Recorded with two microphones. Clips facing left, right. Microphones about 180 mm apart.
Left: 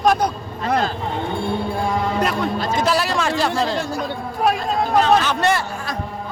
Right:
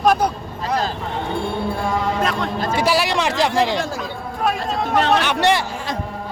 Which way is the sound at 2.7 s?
10° right (ahead or behind).